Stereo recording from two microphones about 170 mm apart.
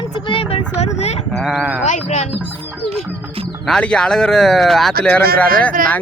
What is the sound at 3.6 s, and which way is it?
Speech, 5° left (ahead or behind).